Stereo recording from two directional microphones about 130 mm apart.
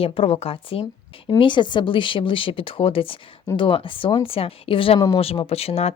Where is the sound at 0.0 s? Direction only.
45° left (ahead or behind).